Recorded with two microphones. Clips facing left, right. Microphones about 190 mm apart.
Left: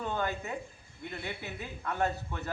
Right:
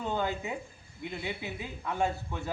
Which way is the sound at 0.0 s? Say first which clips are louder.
Right 2 dB; 15° right (ahead or behind).